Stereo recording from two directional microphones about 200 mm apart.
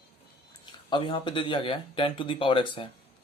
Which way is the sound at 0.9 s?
25° left (ahead or behind).